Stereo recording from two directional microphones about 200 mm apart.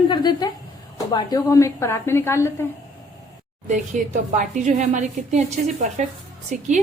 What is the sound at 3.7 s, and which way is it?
A woman's voice, 40° right (ahead or behind).